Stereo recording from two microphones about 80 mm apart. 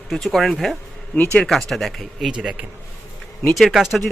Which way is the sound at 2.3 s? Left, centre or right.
Centre.